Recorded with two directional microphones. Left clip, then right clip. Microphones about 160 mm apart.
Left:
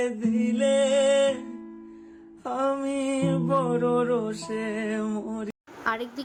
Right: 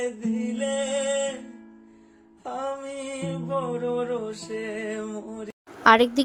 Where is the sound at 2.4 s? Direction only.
35° left (ahead or behind).